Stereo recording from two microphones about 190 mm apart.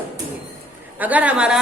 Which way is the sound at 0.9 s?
10° right (ahead or behind).